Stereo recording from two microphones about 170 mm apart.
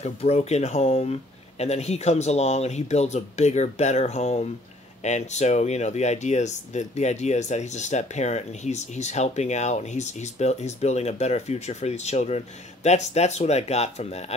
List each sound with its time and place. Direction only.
0.0 s speech: 40° left (ahead or behind)